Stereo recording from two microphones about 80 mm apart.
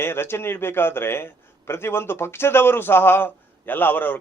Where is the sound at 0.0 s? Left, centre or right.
Left.